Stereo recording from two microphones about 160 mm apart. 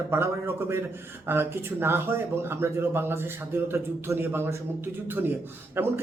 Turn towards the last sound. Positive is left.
turn(degrees=-15)  # may be behind; listen again after turning